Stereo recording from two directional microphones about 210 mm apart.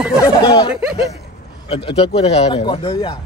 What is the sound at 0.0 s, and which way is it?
Speech, 5° right (ahead or behind).